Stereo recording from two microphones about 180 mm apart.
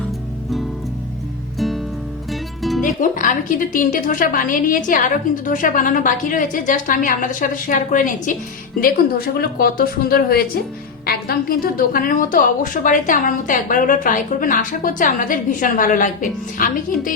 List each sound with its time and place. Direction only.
1.5 s music: centre (ahead or behind)
2.8 s a woman's voice: 45° left (ahead or behind)